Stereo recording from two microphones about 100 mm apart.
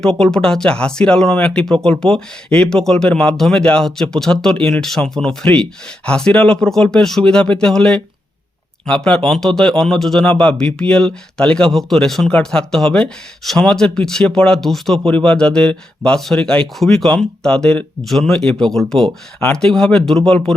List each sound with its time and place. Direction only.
0.2 s a man's voice: 5° left (ahead or behind)